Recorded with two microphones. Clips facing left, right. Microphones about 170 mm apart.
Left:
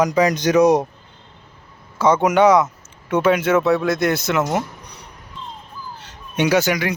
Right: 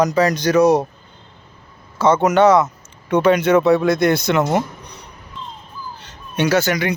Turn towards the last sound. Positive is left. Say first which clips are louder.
# even
turn(degrees=15)  # may be behind; listen again after turning